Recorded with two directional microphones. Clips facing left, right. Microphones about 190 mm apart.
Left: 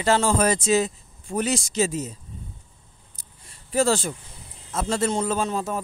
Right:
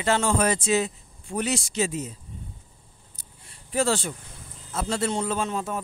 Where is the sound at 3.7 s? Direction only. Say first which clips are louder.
Left 3 dB; 40° left (ahead or behind).